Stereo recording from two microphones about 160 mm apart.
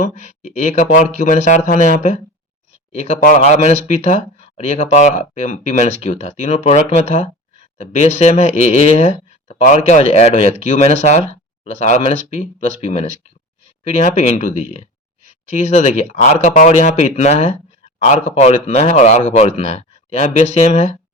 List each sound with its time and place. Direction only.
0.0 s speech: 45° left (ahead or behind)